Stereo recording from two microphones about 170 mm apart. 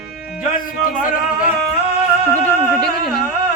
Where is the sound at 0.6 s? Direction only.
55° left (ahead or behind).